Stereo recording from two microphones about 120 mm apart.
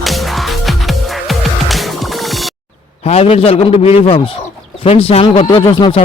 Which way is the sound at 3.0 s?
55° left (ahead or behind).